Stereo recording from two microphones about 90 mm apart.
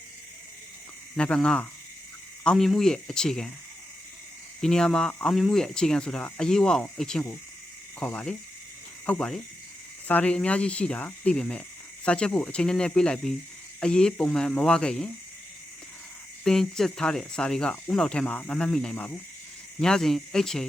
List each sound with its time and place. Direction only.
1.1 s speech: 10° left (ahead or behind)
4.6 s speech: 5° left (ahead or behind)
16.4 s speech: 5° left (ahead or behind)
18.3 s speech: 15° left (ahead or behind)
18.5 s speech: 5° left (ahead or behind)